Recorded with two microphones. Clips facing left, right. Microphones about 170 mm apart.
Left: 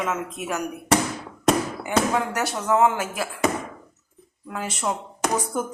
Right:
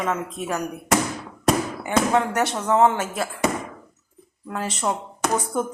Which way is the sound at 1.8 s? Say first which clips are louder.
Right 3 dB; 25° right (ahead or behind).